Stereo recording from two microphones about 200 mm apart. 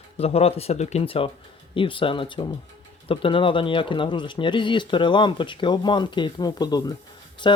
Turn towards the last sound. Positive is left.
turn(degrees=25)  # may be behind; listen again after turning